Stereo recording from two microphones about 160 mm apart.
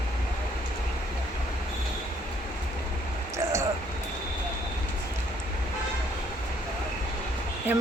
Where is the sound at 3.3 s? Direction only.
20° right (ahead or behind).